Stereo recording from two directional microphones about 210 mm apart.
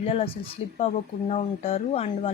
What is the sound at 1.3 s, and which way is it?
Speech, 30° left (ahead or behind).